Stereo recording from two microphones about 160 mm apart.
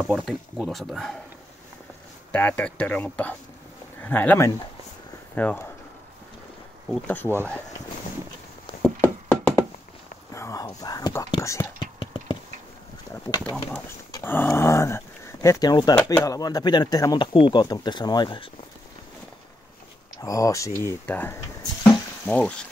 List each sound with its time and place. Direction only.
0.1 s speech: centre (ahead or behind)
2.3 s speech: 10° left (ahead or behind)
6.9 s speech: 10° left (ahead or behind)
8.8 s music: 10° left (ahead or behind)
10.3 s whispering: 20° left (ahead or behind)
12.0 s a sound: 30° left (ahead or behind)
13.4 s speech: 10° left (ahead or behind); by 18.5 s 30° left (ahead or behind)
20.2 s speech: 20° left (ahead or behind)